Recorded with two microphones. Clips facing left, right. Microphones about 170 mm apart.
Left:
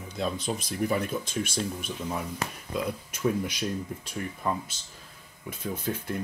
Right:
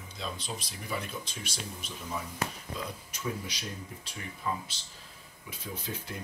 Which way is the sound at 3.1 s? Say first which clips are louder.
Left 10 dB; 50° left (ahead or behind).